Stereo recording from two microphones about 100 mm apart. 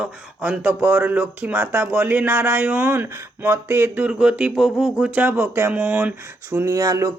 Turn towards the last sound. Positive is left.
turn(degrees=-35)  # may be behind; listen again after turning